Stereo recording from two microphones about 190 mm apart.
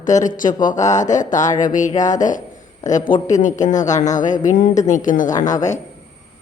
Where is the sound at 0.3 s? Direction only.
45° left (ahead or behind).